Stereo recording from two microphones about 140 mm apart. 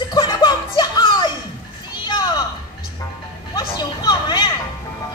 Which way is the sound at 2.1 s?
30° left (ahead or behind).